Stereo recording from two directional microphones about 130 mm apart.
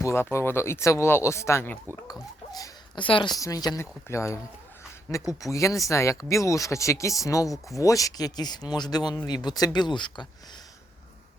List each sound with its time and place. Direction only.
0.0 s speech: 20° left (ahead or behind)
2.5 s speech: 30° left (ahead or behind)
3.3 s speech: 30° left (ahead or behind)